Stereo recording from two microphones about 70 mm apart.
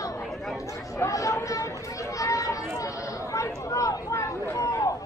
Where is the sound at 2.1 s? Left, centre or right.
Left.